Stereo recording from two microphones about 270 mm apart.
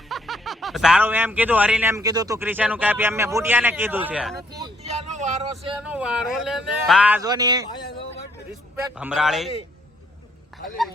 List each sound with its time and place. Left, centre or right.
0.1 s speech: centre
4.9 s speech: right
5.8 s speech: centre
9.0 s speech: centre